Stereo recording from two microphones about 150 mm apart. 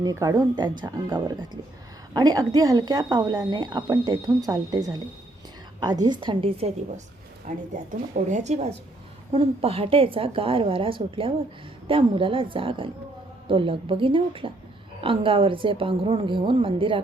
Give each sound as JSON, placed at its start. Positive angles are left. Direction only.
{"t": 0.0, "sound": "a woman's voice", "side_deg": -20}
{"t": 7.4, "sound": "a woman's voice", "side_deg": -55}